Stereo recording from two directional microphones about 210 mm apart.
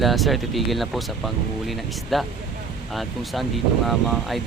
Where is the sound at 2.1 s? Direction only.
Centre (ahead or behind).